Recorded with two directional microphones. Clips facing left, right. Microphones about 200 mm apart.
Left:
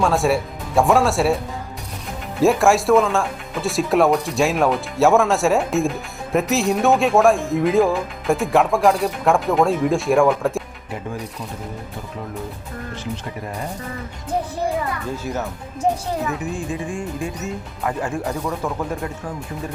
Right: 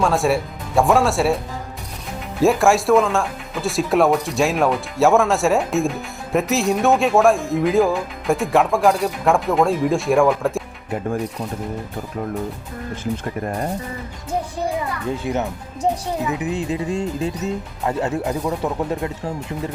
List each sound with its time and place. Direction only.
0.0 s speech: centre (ahead or behind)
2.4 s speech: centre (ahead or behind)
15.3 s speech: 15° right (ahead or behind)